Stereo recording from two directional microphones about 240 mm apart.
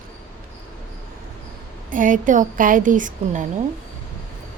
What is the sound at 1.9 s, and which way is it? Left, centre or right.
A woman's voice, right.